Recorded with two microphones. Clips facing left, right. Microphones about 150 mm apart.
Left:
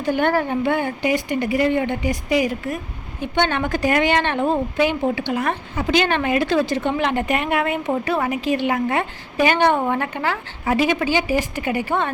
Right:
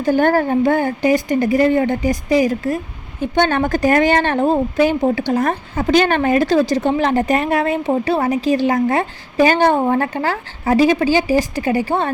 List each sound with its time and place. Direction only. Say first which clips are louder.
0.0 s speech: right 5 dB; 40° right (ahead or behind)